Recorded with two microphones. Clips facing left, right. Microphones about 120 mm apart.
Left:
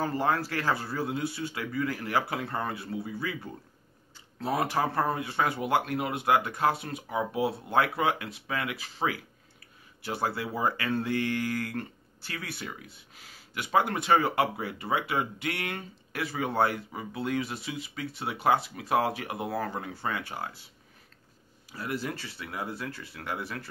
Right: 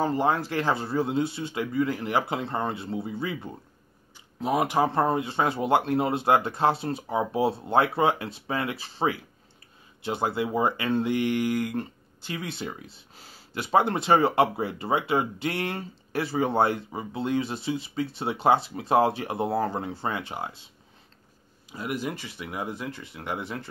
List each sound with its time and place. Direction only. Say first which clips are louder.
0.0 s speech: right 3 dB; 20° right (ahead or behind)